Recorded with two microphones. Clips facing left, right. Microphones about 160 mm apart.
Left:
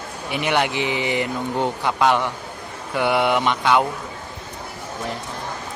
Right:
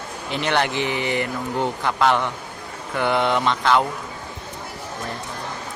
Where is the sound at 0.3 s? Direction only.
15° left (ahead or behind).